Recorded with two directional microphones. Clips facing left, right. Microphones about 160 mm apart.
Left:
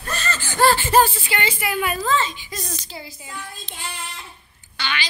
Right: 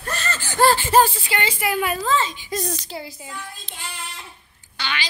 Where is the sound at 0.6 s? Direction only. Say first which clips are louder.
Even; 30° right (ahead or behind).